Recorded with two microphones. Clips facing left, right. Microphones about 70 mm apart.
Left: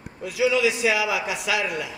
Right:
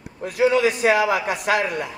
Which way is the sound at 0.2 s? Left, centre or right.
Right.